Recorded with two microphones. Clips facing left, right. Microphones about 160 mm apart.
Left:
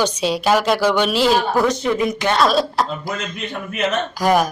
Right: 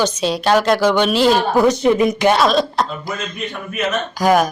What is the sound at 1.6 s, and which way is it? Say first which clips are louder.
Speech: right 5 dB; 15° right (ahead or behind).